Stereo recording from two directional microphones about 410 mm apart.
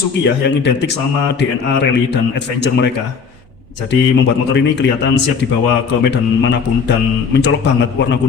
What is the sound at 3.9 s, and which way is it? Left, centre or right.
A man's voice, left.